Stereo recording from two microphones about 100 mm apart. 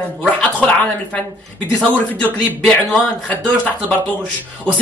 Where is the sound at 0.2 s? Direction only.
15° left (ahead or behind).